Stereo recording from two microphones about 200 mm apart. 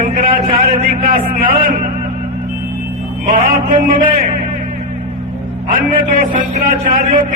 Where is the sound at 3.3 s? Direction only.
45° right (ahead or behind).